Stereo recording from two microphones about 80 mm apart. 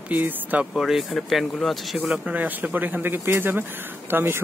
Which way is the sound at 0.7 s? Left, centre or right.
Centre.